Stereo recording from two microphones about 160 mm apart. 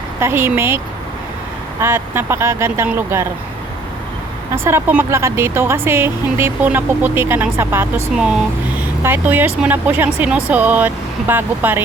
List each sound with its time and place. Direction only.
0.2 s speech: 15° right (ahead or behind)
1.8 s speech: 15° right (ahead or behind)
4.5 s speech: 15° right (ahead or behind)
8.1 s speech: 5° right (ahead or behind)